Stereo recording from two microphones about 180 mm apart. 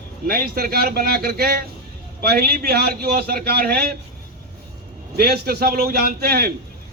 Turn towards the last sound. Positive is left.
turn(degrees=-60)  # may be behind; listen again after turning